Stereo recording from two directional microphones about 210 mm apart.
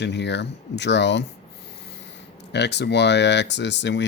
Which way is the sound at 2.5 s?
55° left (ahead or behind).